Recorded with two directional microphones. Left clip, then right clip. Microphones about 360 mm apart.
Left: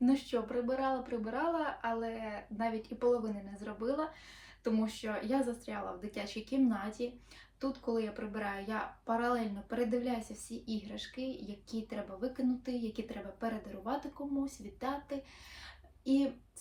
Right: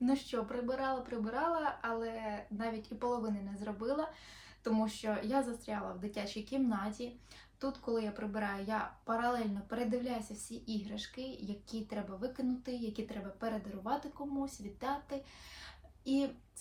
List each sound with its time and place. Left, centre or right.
0.0 s speech: centre